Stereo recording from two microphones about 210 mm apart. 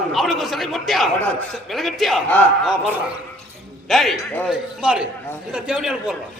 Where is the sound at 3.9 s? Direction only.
Centre (ahead or behind).